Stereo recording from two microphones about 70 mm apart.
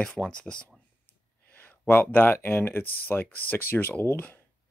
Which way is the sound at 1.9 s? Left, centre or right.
Left.